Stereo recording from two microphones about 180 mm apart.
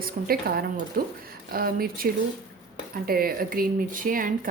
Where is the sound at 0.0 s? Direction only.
55° right (ahead or behind).